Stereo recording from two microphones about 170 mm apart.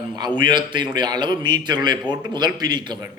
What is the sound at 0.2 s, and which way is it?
A man's voice, 25° right (ahead or behind).